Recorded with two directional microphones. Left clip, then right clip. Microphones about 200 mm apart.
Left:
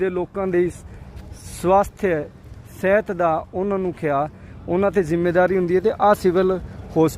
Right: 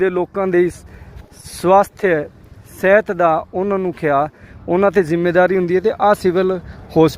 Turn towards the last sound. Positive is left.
turn(degrees=-10)  # may be behind; listen again after turning